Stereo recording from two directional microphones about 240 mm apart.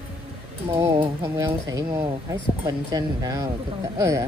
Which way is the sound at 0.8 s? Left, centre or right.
Centre.